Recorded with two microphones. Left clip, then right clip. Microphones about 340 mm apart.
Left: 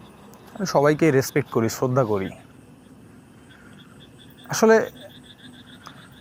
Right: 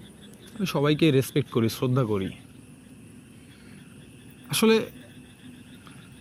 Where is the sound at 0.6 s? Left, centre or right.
Centre.